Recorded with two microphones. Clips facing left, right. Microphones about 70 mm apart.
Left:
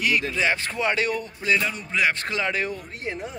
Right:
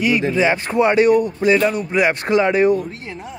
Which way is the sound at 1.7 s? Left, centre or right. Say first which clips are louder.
Right 7 dB; centre.